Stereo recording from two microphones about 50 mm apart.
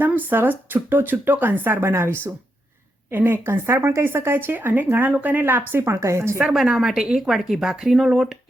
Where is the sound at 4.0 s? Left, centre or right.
Right.